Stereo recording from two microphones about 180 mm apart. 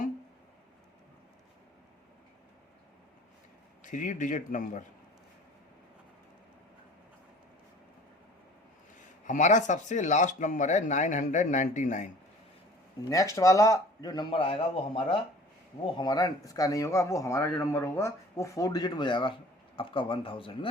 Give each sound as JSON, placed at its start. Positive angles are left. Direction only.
{"t": 3.8, "sound": "speech", "side_deg": 45}
{"t": 9.2, "sound": "speech", "side_deg": 45}
{"t": 13.1, "sound": "speech", "side_deg": 20}